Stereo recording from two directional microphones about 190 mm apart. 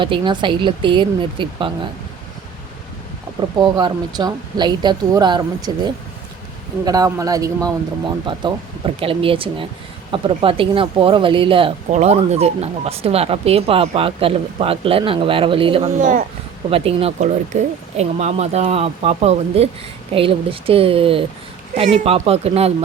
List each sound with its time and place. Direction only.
0.0 s speech: 25° right (ahead or behind)
3.6 s speech: 25° right (ahead or behind)
16.0 s speech: 40° right (ahead or behind)
16.6 s speech: 30° right (ahead or behind)